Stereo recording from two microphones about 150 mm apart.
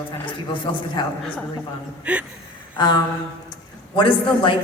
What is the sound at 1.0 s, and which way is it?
Speech, 30° left (ahead or behind).